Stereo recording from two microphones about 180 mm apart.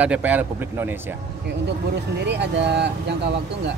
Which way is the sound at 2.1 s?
70° right (ahead or behind).